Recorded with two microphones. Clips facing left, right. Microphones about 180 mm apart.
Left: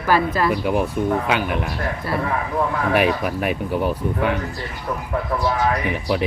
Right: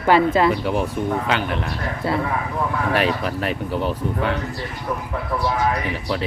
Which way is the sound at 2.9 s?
15° left (ahead or behind).